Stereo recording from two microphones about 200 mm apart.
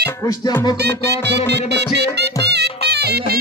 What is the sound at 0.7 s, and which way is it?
Music, 55° right (ahead or behind).